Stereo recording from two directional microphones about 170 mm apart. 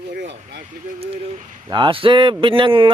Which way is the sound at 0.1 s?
90° right.